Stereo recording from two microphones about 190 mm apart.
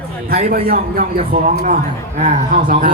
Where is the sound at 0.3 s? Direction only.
55° right (ahead or behind).